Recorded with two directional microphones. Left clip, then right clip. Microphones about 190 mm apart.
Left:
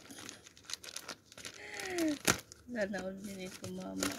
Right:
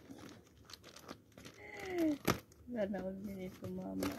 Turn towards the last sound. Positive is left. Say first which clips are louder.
# left 2 dB
turn(degrees=15)  # may be behind; listen again after turning